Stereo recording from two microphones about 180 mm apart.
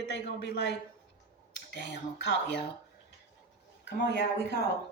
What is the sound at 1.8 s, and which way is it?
Speech, 75° left (ahead or behind).